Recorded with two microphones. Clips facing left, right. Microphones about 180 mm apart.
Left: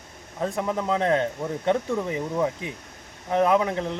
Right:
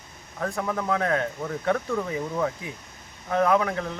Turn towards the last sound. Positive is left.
turn(degrees=20)  # may be behind; listen again after turning